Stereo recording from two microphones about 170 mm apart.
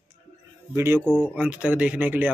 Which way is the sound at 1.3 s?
5° right (ahead or behind).